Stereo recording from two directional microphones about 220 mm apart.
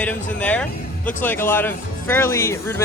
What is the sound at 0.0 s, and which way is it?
Speech, 5° left (ahead or behind).